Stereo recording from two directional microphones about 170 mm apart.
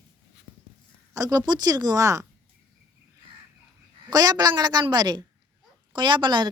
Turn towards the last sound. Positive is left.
turn(degrees=-25)  # may be behind; listen again after turning